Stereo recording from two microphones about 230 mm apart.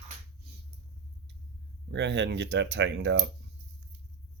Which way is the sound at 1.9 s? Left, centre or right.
Right.